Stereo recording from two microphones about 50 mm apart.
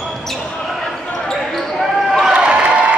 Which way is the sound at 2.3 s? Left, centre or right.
Right.